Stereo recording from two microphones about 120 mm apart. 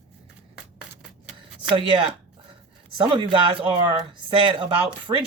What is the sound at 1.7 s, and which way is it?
Speech, 45° right (ahead or behind).